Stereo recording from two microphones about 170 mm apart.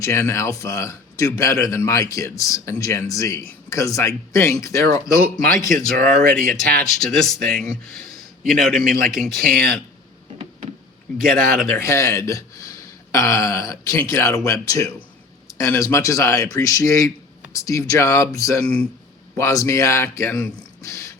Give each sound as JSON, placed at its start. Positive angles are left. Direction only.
{"t": 0.0, "sound": "speech", "side_deg": 15}
{"t": 5.9, "sound": "speech", "side_deg": -55}
{"t": 7.0, "sound": "speech", "side_deg": 0}
{"t": 8.8, "sound": "speech", "side_deg": -55}
{"t": 11.2, "sound": "speech", "side_deg": -55}
{"t": 11.7, "sound": "speech", "side_deg": 15}
{"t": 18.6, "sound": "speech", "side_deg": 5}
{"t": 19.4, "sound": "speech", "side_deg": 15}